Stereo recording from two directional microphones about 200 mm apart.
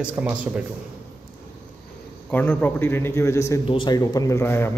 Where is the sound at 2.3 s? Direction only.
10° left (ahead or behind).